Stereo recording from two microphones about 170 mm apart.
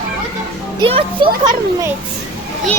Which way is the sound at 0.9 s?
30° right (ahead or behind).